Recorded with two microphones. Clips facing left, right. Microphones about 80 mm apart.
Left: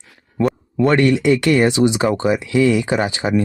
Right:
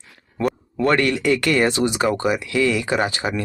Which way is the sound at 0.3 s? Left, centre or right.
Centre.